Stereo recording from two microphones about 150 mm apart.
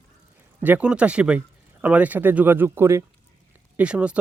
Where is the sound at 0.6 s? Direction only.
10° right (ahead or behind).